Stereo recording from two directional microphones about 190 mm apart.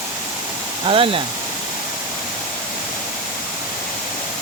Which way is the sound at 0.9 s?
30° right (ahead or behind).